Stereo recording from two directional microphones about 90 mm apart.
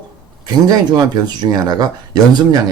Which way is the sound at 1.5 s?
50° right (ahead or behind).